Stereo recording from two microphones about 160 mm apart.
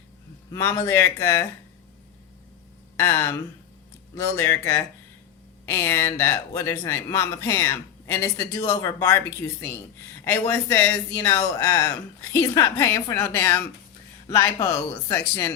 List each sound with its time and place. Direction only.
0.5 s speech: 15° left (ahead or behind)
3.0 s speech: 15° left (ahead or behind)